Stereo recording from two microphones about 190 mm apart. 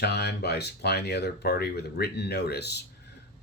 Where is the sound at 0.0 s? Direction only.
60° left (ahead or behind).